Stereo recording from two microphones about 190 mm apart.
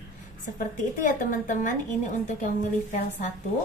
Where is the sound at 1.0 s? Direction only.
40° left (ahead or behind).